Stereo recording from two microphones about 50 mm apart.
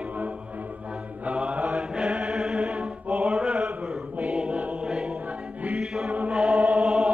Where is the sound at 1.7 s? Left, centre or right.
Centre.